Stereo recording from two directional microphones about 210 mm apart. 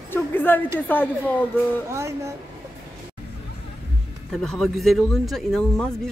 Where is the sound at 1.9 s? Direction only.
15° right (ahead or behind).